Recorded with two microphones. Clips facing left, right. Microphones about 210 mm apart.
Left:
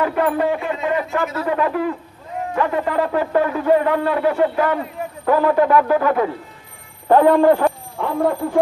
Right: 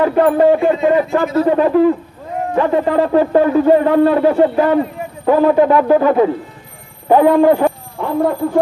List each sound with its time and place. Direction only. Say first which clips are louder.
0.0 s speech: right 7 dB; 35° right (ahead or behind)
7.1 s speech: right 2 dB; 10° right (ahead or behind)